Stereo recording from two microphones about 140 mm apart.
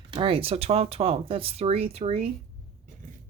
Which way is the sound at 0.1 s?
40° right (ahead or behind).